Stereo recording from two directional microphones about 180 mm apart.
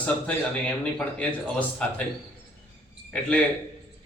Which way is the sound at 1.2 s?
5° left (ahead or behind).